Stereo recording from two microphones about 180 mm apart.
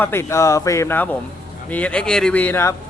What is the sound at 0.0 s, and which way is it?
Speech, 15° left (ahead or behind).